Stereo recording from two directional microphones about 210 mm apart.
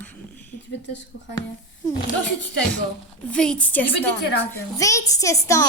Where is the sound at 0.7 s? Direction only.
55° left (ahead or behind).